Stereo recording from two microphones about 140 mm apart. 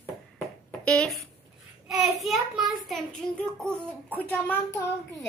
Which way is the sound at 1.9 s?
Centre (ahead or behind).